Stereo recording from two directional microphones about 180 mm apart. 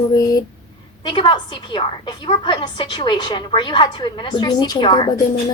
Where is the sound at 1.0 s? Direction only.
25° left (ahead or behind).